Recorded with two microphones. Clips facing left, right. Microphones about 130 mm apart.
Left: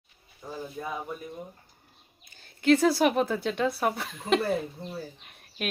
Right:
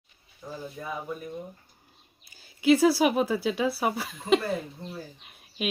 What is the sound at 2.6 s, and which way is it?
A woman's voice, 5° right (ahead or behind).